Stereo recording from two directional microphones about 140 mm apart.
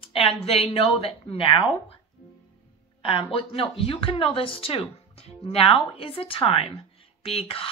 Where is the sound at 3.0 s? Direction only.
40° left (ahead or behind).